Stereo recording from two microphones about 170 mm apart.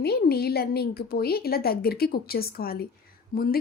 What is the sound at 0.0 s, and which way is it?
Speech, 70° left (ahead or behind).